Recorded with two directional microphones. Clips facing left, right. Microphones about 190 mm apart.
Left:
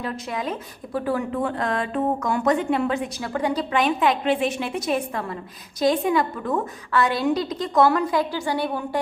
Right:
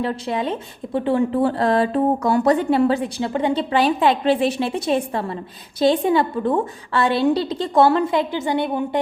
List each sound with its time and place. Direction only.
0.0 s a woman's voice: 30° right (ahead or behind)